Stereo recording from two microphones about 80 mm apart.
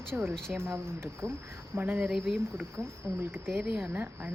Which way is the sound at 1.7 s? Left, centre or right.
Right.